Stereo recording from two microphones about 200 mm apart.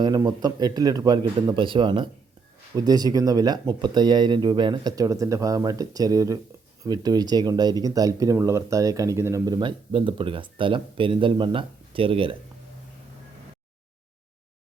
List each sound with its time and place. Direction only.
0.0 s speech: 20° right (ahead or behind)